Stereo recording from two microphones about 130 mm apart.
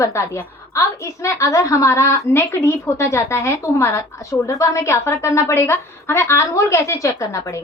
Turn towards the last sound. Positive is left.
turn(degrees=25)  # may be behind; listen again after turning